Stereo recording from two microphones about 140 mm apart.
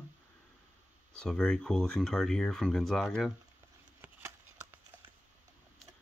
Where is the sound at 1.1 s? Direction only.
5° left (ahead or behind).